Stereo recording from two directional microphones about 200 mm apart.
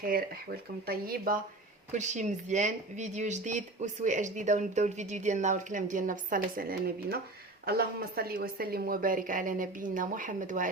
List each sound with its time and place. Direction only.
0.9 s speech: 50° right (ahead or behind)